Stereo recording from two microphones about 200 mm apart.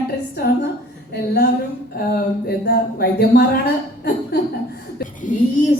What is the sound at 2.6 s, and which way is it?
Speech, 55° left (ahead or behind).